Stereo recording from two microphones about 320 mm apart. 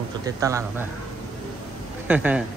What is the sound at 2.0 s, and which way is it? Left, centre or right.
Speech, centre.